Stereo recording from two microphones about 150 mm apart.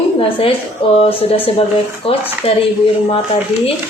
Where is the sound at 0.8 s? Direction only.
40° left (ahead or behind).